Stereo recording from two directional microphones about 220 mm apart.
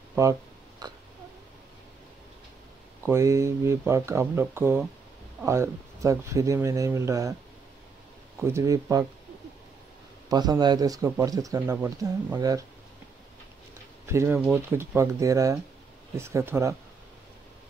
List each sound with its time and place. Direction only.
0.1 s a sound: 15° right (ahead or behind)
3.1 s speech: 15° right (ahead or behind)
8.4 s speech: 10° right (ahead or behind)
10.3 s speech: 20° right (ahead or behind)
14.0 s speech: 10° right (ahead or behind)